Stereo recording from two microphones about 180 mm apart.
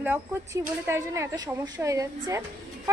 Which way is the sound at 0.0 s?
10° right (ahead or behind).